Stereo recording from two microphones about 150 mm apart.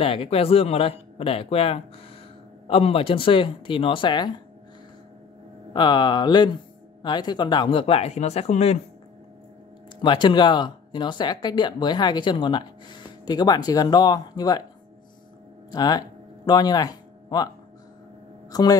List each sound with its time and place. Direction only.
0.0 s speech: 40° left (ahead or behind)
5.7 s speech: 30° left (ahead or behind); by 8.7 s 45° left (ahead or behind)
10.0 s speech: 30° left (ahead or behind)
15.7 s speech: 25° left (ahead or behind)
18.5 s speech: 25° left (ahead or behind)